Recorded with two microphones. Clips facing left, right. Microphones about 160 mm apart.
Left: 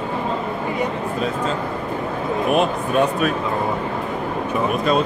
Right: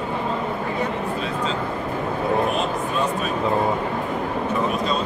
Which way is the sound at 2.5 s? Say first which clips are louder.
Left 5 dB; 60° left (ahead or behind).